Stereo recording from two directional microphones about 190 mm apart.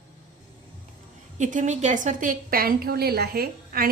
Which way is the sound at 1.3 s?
40° right (ahead or behind).